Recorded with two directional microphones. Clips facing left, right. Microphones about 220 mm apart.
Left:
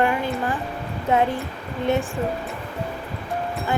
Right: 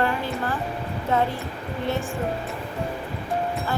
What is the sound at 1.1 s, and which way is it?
Speech, 15° left (ahead or behind).